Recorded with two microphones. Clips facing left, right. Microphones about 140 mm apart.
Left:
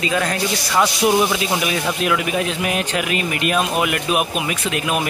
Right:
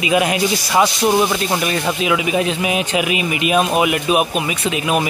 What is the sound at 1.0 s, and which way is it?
A man's voice, centre (ahead or behind).